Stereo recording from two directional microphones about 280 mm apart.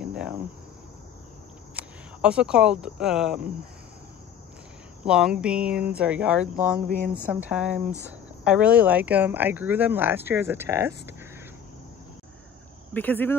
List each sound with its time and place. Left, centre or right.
0.0 s cricket: centre
1.8 s speech: centre
5.0 s speech: centre
6.9 s speech: right
7.2 s speech: centre
12.9 s speech: centre